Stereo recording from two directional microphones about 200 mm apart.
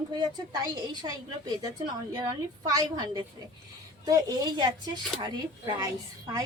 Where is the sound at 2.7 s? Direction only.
20° right (ahead or behind).